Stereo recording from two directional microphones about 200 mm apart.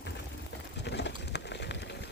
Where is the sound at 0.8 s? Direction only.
60° left (ahead or behind).